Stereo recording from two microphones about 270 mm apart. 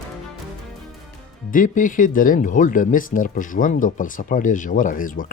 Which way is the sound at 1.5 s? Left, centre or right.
Left.